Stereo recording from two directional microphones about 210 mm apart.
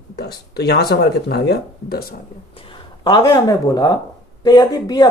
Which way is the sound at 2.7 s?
20° left (ahead or behind).